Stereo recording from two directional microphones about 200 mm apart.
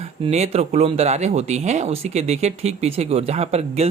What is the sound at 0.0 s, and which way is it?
Speech, 30° right (ahead or behind).